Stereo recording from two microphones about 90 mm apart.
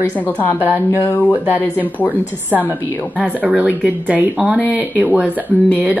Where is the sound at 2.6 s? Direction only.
30° left (ahead or behind).